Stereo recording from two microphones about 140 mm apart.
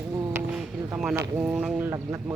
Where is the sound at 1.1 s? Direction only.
20° right (ahead or behind).